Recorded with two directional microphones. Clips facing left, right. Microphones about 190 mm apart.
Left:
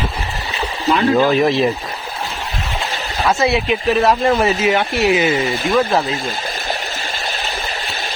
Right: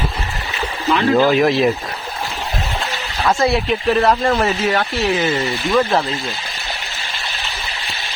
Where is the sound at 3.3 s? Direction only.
5° left (ahead or behind).